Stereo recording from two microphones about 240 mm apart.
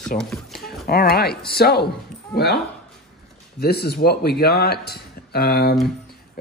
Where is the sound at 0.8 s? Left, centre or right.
Left.